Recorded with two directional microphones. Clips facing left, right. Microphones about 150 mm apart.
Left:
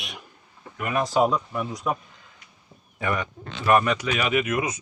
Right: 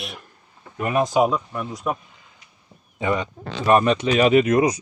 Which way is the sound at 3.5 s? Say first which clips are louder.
Right 3 dB; 35° right (ahead or behind).